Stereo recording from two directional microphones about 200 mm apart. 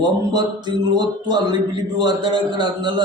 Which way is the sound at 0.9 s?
20° right (ahead or behind).